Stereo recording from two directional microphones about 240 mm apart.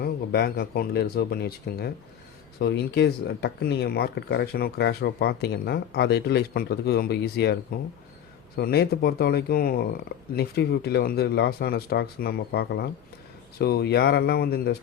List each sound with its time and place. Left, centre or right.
0.0 s speech: left